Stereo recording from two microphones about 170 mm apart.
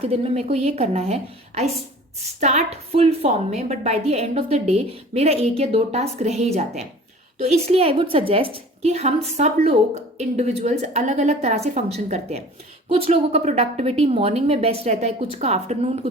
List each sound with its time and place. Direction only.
0.0 s a woman's voice: 35° right (ahead or behind)